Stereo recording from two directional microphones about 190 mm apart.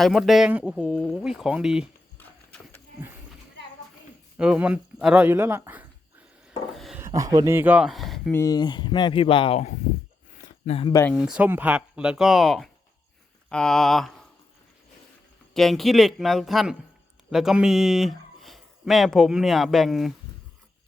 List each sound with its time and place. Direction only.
0.0 s speech: centre (ahead or behind)
2.1 s clip-clop: 10° left (ahead or behind)
4.4 s speech: 5° right (ahead or behind)
6.7 s a sound: centre (ahead or behind)
7.0 s speech: 20° right (ahead or behind); by 8.4 s centre (ahead or behind)
8.4 s speech: 20° left (ahead or behind)
10.4 s a sound: 30° left (ahead or behind)
10.9 s speech: 10° left (ahead or behind)
11.2 s speech: 5° right (ahead or behind)
15.5 s speech: centre (ahead or behind)